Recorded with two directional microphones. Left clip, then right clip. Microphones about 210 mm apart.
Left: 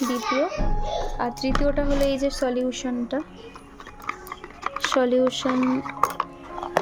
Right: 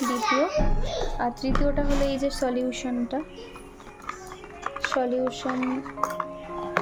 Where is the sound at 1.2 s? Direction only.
15° left (ahead or behind).